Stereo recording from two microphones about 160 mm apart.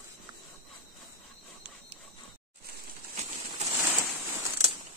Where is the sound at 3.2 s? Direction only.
45° right (ahead or behind).